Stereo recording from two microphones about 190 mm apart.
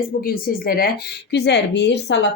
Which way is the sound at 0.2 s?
50° left (ahead or behind).